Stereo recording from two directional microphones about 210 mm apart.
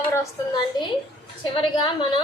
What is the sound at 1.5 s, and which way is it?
Speech, 25° left (ahead or behind).